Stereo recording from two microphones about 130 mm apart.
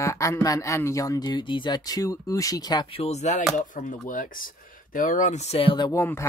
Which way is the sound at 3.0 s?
60° left (ahead or behind).